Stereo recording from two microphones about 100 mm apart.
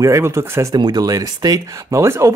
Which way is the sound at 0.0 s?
30° right (ahead or behind).